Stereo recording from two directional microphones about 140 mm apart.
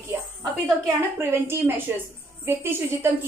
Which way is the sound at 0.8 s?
15° right (ahead or behind).